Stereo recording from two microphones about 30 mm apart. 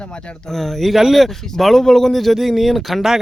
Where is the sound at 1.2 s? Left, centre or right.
Centre.